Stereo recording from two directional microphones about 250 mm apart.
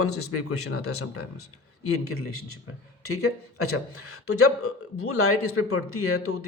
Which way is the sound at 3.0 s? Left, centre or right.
Left.